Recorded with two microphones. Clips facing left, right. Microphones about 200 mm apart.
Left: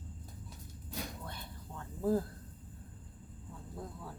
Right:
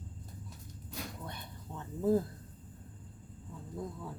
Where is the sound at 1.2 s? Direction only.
20° right (ahead or behind).